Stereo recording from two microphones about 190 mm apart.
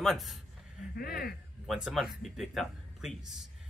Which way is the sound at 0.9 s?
50° left (ahead or behind).